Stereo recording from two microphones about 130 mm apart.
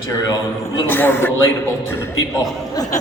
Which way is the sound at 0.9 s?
15° left (ahead or behind).